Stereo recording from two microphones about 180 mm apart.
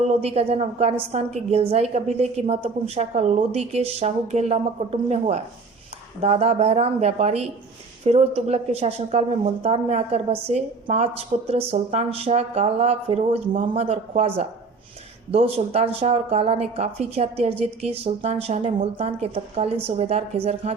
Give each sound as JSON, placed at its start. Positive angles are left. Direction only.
{"t": 0.1, "sound": "speech", "side_deg": -35}